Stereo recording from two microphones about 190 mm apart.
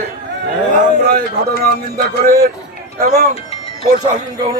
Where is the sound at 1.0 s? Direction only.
55° right (ahead or behind).